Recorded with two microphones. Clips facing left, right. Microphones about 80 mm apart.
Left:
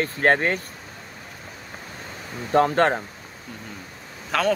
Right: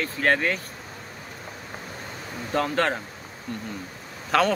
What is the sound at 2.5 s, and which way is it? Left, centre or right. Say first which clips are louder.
Speech: left 6 dB; left.